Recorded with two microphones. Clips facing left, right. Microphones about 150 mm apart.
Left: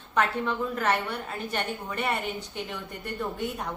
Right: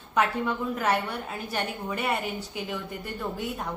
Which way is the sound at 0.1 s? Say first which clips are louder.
Right 1 dB; 10° right (ahead or behind).